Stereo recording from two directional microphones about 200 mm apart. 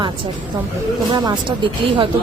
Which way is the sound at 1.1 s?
20° right (ahead or behind).